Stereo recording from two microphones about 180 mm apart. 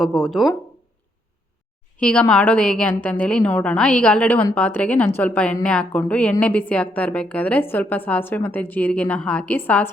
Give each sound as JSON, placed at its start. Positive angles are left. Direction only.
{"t": 0.0, "sound": "speech", "side_deg": 0}
{"t": 2.0, "sound": "a woman's voice", "side_deg": 5}